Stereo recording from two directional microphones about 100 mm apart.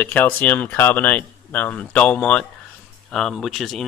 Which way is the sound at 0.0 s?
20° left (ahead or behind).